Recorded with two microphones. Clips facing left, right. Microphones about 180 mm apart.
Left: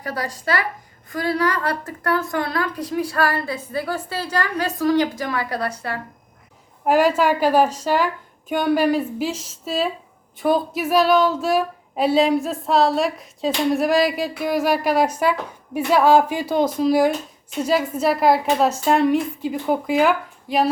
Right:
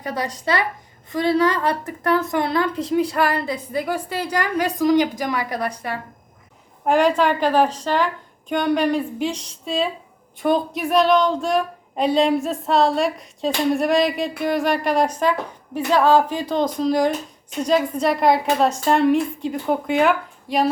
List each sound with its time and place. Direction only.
0.0 s a woman's voice: 20° right (ahead or behind)
6.8 s speech: 5° left (ahead or behind)